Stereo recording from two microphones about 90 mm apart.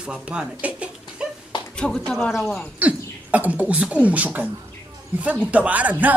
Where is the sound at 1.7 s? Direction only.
10° left (ahead or behind).